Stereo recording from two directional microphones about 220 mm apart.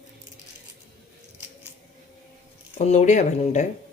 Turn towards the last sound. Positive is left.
turn(degrees=35)  # may be behind; listen again after turning